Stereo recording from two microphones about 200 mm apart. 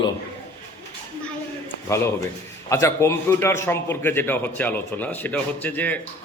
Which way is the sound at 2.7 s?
15° left (ahead or behind).